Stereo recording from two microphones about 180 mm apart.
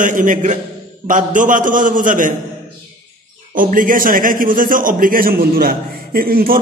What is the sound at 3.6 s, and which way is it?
A man's voice, 50° right (ahead or behind).